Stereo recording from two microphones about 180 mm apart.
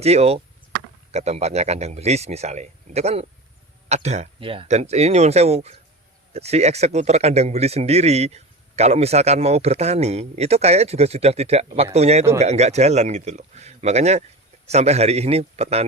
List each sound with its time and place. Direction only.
0.0 s speech: 35° right (ahead or behind)